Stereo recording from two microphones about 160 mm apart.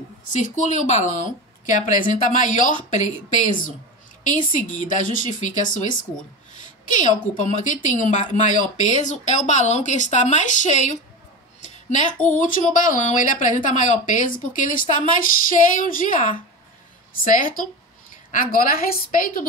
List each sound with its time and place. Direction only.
0.3 s speech: 50° left (ahead or behind)
11.6 s a sound: 50° left (ahead or behind)
12.4 s a woman's voice: 55° left (ahead or behind)